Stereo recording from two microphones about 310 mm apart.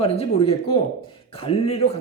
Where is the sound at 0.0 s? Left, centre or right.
Centre.